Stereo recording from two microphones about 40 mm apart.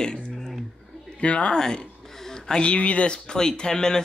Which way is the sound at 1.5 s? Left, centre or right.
Centre.